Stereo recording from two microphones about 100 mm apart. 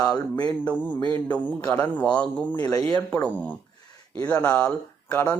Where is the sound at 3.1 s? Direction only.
10° left (ahead or behind).